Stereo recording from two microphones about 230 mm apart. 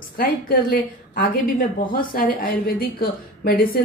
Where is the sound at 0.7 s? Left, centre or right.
Left.